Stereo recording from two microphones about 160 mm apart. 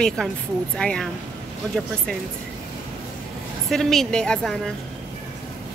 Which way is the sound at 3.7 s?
Centre (ahead or behind).